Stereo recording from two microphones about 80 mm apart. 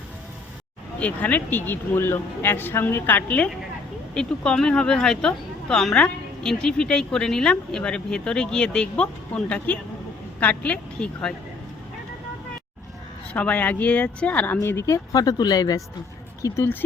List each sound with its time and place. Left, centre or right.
0.9 s speech: centre
4.1 s speech: centre
13.3 s speech: centre; by 15.8 s left
16.4 s speech: left